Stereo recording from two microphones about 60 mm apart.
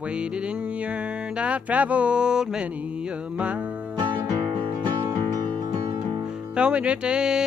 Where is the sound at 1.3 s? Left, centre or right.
Right.